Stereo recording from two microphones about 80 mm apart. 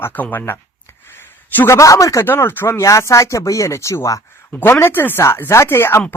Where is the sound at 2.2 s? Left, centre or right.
Left.